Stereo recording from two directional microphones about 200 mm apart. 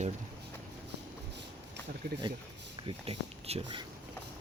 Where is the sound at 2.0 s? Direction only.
60° right (ahead or behind).